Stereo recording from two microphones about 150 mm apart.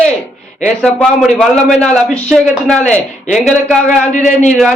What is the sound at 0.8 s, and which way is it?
A man's voice, centre (ahead or behind).